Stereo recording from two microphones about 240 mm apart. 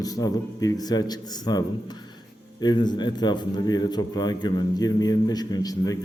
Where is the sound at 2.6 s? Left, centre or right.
Centre.